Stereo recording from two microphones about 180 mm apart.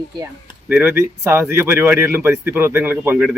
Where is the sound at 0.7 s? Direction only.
10° right (ahead or behind).